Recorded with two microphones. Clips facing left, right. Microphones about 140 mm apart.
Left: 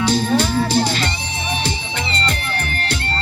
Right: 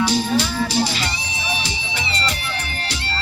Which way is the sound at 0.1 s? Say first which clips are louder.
Left 3 dB; 50° left (ahead or behind).